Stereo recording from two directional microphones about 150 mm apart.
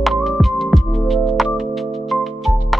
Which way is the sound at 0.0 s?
Centre (ahead or behind).